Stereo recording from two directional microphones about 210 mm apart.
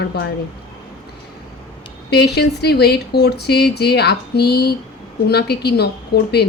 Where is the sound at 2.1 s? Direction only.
50° left (ahead or behind).